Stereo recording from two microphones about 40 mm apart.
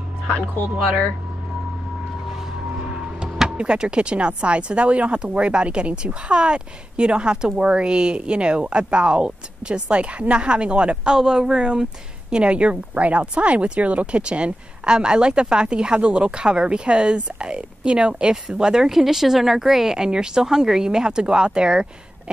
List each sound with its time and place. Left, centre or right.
3.4 s speech: right
11.1 s speech: centre
18.9 s speech: centre